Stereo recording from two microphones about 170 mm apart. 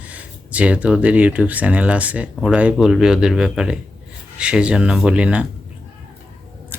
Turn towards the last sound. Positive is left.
turn(degrees=-5)  # may be behind; listen again after turning